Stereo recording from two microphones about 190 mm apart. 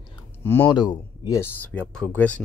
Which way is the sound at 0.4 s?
10° left (ahead or behind).